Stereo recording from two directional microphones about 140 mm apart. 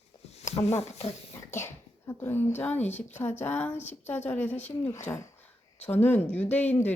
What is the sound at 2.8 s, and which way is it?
Speech, 55° left (ahead or behind).